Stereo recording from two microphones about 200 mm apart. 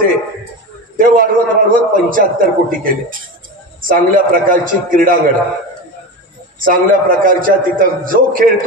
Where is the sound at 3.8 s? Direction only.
45° right (ahead or behind).